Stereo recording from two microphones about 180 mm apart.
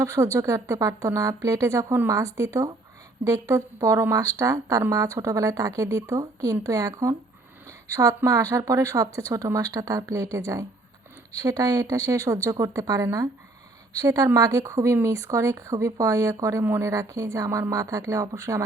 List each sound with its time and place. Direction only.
0.0 s a woman's voice: 15° right (ahead or behind)